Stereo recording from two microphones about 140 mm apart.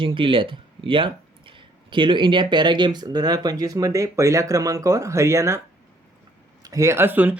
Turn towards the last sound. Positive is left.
turn(degrees=-10)  # may be behind; listen again after turning